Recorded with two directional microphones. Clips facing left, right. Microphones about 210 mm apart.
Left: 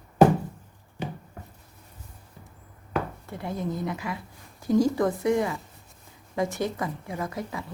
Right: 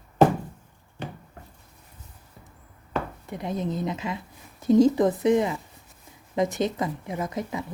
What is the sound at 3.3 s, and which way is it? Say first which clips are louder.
Speech: right 2 dB; 20° right (ahead or behind).